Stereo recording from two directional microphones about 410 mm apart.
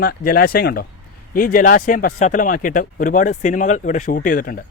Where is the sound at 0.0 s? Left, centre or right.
Left.